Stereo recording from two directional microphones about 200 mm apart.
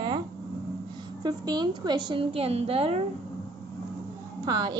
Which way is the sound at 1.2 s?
20° right (ahead or behind).